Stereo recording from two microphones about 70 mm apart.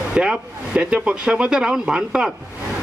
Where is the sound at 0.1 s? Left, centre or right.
Centre.